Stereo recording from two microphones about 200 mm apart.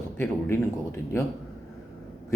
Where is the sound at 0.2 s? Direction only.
10° left (ahead or behind).